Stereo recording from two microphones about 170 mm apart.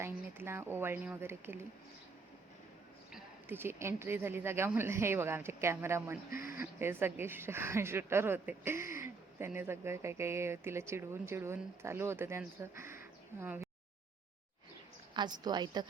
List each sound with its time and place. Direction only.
0.0 s speech: 15° right (ahead or behind)
3.1 s speech: 10° right (ahead or behind)
15.1 s a woman's voice: 25° right (ahead or behind)